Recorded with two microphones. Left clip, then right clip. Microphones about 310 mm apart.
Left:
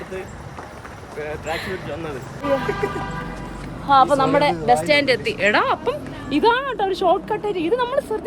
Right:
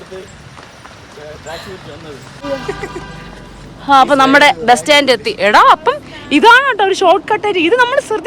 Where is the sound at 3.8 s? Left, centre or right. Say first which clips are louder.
Right 7 dB; right.